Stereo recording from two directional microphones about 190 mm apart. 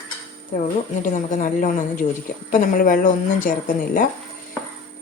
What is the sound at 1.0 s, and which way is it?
Speech, 40° left (ahead or behind).